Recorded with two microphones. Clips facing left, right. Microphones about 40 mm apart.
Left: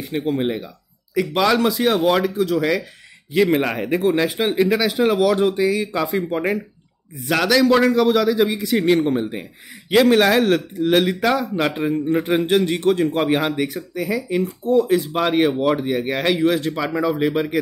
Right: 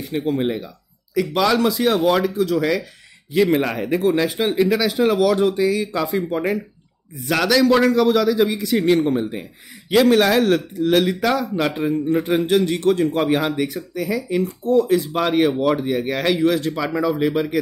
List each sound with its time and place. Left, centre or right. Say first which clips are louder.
0.0 s speech: even; centre
7.2 s speech: even; centre